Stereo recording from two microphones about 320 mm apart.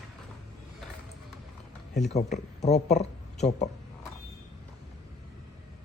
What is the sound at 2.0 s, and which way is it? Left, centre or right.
Speech, left.